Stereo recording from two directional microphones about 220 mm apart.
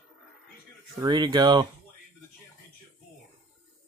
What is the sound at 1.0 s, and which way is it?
Speech, 20° right (ahead or behind).